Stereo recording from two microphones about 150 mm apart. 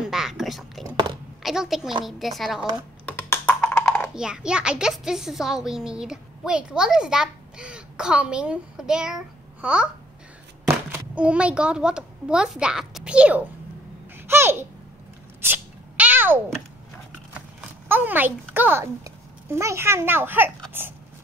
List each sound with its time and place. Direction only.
0.0 s a sound: 5° right (ahead or behind)
1.4 s a woman's voice: centre (ahead or behind)
3.1 s computer keyboard: 10° left (ahead or behind)
4.1 s a child's voice: 5° right (ahead or behind)
10.9 s a child's voice: 10° right (ahead or behind)
15.4 s a sound: 15° right (ahead or behind)
17.6 s speech: 10° right (ahead or behind)